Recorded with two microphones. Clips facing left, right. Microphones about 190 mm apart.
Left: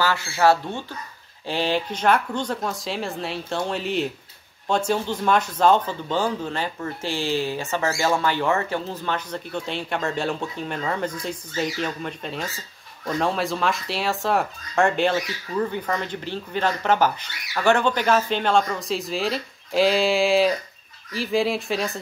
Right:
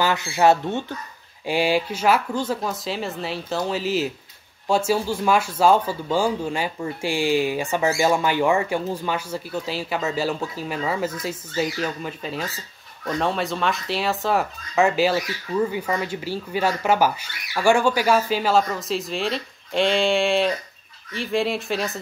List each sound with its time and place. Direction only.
0.0 s speech: 20° right (ahead or behind); by 22.0 s centre (ahead or behind)